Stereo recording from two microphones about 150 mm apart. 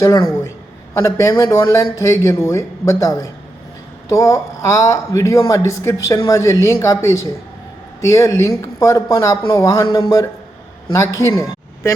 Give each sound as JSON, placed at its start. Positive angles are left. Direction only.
{"t": 0.0, "sound": "speech", "side_deg": 25}